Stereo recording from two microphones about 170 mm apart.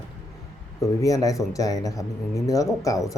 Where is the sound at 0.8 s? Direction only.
20° left (ahead or behind).